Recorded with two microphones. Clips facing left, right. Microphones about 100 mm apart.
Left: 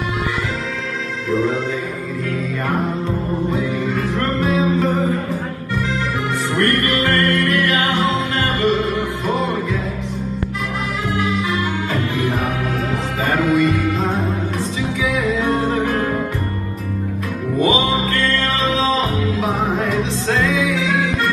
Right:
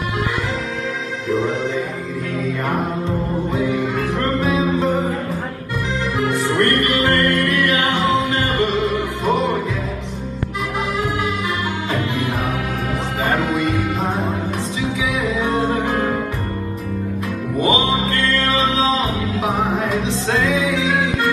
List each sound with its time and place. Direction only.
4.4 s music: 20° right (ahead or behind)
6.5 s music: 20° right (ahead or behind)
13.2 s music: 20° right (ahead or behind)
17.6 s music: 20° right (ahead or behind)
20.2 s music: 20° right (ahead or behind)